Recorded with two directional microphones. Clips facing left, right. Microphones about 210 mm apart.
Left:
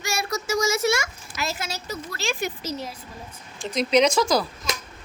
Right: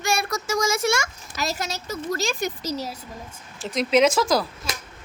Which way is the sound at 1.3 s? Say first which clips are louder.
Right 2 dB; 40° right (ahead or behind).